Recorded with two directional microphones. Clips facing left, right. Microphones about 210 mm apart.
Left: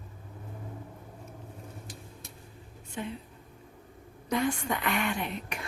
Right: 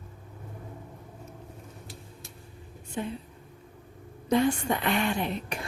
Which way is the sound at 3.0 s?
35° right (ahead or behind).